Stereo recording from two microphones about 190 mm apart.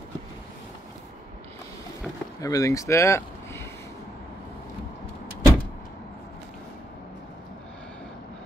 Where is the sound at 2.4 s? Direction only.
20° left (ahead or behind).